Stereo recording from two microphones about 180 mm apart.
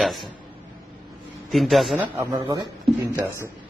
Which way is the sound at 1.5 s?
Centre (ahead or behind).